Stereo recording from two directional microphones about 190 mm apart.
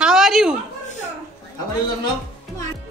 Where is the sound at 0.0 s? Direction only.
5° right (ahead or behind).